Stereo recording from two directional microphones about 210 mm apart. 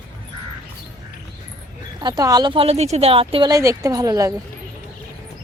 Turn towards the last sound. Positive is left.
turn(degrees=-15)  # may be behind; listen again after turning